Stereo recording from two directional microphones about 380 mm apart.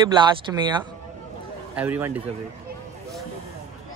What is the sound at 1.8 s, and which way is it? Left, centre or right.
Speech, centre.